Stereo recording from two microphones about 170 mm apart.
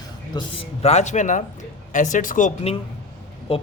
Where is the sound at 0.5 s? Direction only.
40° left (ahead or behind).